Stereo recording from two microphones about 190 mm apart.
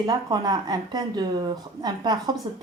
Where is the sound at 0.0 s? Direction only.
20° right (ahead or behind).